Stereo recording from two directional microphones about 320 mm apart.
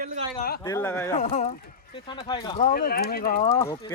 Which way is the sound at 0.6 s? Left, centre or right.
Centre.